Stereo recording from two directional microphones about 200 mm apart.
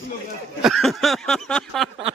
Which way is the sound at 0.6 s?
Centre (ahead or behind).